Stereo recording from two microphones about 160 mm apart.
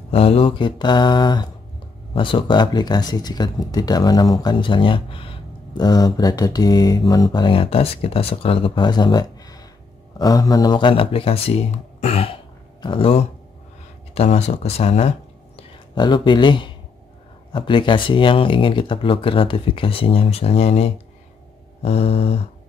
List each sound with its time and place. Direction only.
0.1 s speech: 40° left (ahead or behind)